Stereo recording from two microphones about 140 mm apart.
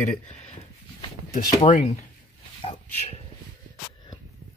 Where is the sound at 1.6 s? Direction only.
60° left (ahead or behind).